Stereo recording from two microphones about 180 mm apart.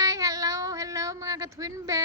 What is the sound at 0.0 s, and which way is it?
A woman's voice, 20° right (ahead or behind).